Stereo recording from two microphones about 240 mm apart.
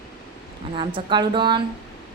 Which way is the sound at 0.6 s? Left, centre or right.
Right.